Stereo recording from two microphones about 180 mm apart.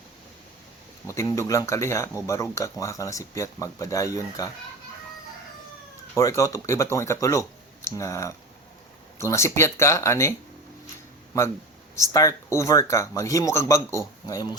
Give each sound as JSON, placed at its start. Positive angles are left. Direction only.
{"t": 1.0, "sound": "speech", "side_deg": 15}
{"t": 6.1, "sound": "speech", "side_deg": 20}
{"t": 11.9, "sound": "speech", "side_deg": 15}